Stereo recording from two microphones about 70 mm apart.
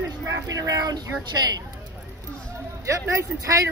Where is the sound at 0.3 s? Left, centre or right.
Right.